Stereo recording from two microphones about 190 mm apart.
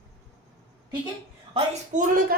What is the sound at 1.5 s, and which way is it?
Speech, 40° right (ahead or behind).